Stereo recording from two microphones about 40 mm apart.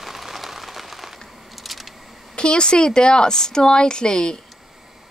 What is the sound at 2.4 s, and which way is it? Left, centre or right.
Speech, left.